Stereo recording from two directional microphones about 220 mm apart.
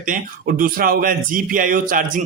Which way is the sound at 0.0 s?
40° right (ahead or behind).